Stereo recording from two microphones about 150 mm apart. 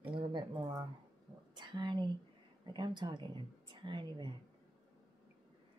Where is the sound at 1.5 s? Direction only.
30° right (ahead or behind).